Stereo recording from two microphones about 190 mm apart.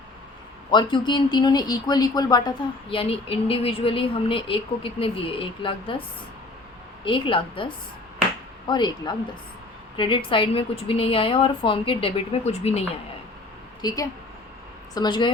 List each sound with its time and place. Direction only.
0.7 s speech: 25° left (ahead or behind)
2.9 s speech: 30° left (ahead or behind)
7.0 s speech: 25° left (ahead or behind)
13.8 s a woman's voice: 20° left (ahead or behind)